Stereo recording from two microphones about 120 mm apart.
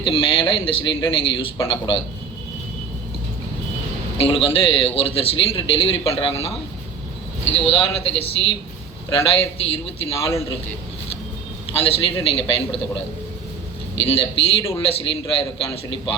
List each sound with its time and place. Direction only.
0.0 s a man's voice: 45° left (ahead or behind)
4.2 s a man's voice: 50° left (ahead or behind)
7.6 s a man's voice: 50° left (ahead or behind)
9.6 s a man's voice: 55° left (ahead or behind)
11.7 s a man's voice: 50° left (ahead or behind)
14.0 s a man's voice: 50° left (ahead or behind)